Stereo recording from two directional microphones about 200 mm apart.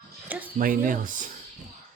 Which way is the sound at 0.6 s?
45° right (ahead or behind).